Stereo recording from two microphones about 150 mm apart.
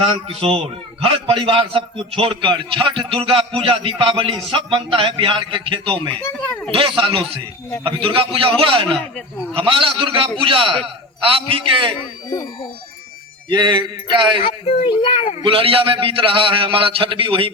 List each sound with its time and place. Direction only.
0.0 s a man's voice: 40° right (ahead or behind)
6.2 s a sound: 15° left (ahead or behind)
6.7 s a man's voice: 35° right (ahead or behind)
13.5 s a man's voice: 30° right (ahead or behind)
14.4 s speech: 40° left (ahead or behind)
15.4 s a man's voice: 35° right (ahead or behind)